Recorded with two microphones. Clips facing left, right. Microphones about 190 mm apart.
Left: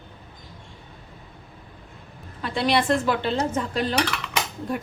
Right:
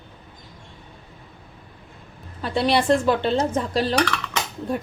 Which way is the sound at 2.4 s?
30° right (ahead or behind).